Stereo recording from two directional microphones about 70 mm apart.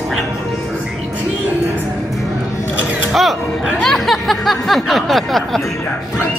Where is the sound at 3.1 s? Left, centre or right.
Centre.